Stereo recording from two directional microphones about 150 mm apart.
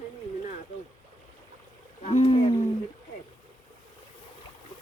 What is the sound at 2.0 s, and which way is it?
Wild animals, 40° left (ahead or behind).